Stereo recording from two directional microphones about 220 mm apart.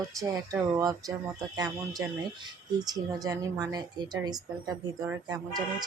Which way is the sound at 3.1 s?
15° right (ahead or behind).